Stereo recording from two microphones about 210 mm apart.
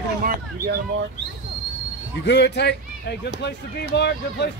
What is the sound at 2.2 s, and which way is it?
A man's voice, 55° left (ahead or behind).